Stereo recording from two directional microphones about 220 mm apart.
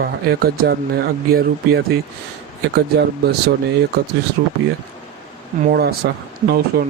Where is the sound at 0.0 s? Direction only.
45° right (ahead or behind).